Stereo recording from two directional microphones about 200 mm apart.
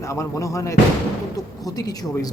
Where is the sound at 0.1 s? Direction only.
15° left (ahead or behind).